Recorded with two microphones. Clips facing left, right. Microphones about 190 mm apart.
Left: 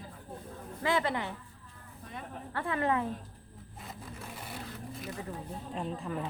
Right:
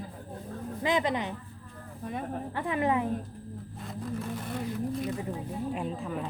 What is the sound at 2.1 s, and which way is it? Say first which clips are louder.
Speech: right 9 dB; 50° right (ahead or behind).